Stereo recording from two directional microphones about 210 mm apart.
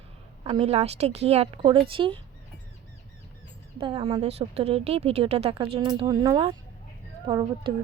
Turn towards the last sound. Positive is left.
turn(degrees=-25)  # may be behind; listen again after turning